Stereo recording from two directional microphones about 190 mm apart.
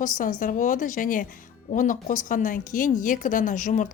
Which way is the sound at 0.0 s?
45° left (ahead or behind).